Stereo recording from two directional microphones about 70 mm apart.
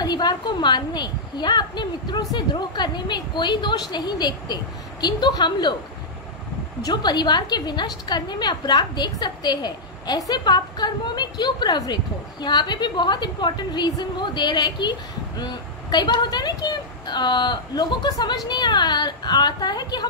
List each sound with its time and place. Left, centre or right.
0.0 s a woman's voice: left
6.8 s a woman's voice: left